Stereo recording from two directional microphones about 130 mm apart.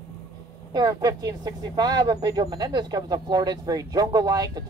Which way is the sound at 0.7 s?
30° right (ahead or behind).